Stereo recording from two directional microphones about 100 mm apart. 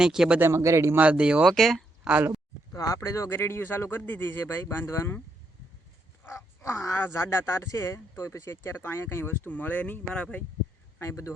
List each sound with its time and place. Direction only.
0.0 s speech: 5° right (ahead or behind)
0.3 s speech: 25° right (ahead or behind)
0.9 s speech: 10° right (ahead or behind)
1.5 s speech: centre (ahead or behind)
2.0 s speech: 10° right (ahead or behind)
2.7 s speech: 35° left (ahead or behind)
6.2 s speech: 25° left (ahead or behind)
11.0 s speech: 30° left (ahead or behind)